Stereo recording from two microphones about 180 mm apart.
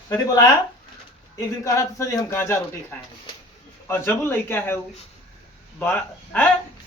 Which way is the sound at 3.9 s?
10° left (ahead or behind).